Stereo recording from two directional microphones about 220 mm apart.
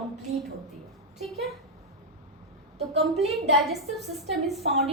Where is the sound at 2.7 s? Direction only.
30° right (ahead or behind).